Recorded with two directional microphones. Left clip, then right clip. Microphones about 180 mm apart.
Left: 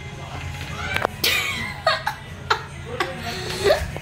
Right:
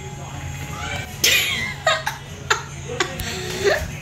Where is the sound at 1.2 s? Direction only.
5° left (ahead or behind).